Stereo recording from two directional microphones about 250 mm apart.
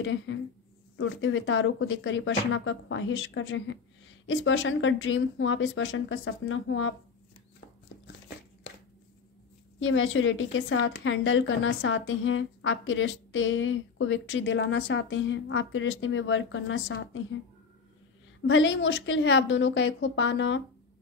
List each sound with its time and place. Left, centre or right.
0.0 s a woman's voice: left
9.8 s a woman's voice: left
18.5 s a woman's voice: left